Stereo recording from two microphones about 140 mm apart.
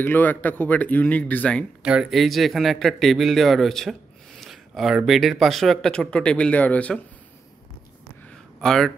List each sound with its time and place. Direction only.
0.0 s speech: 15° left (ahead or behind)
1.8 s speech: 5° right (ahead or behind); by 7.0 s 10° left (ahead or behind)
8.5 s speech: 5° left (ahead or behind)